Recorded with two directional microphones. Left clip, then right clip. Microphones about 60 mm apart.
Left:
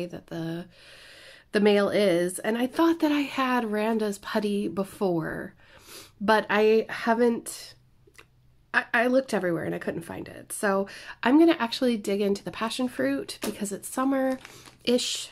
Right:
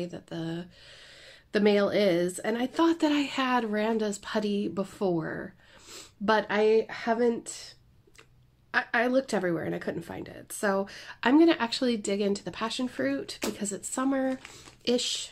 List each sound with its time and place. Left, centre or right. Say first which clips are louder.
0.0 s a woman's voice: left 2 dB; left
4.8 s speech: left 2 dB; left
5.2 s a sound: left 2 dB; left
6.6 s speech: left 2 dB; left
8.7 s a woman's voice: left 3 dB; left
15.0 s speech: left 2 dB; left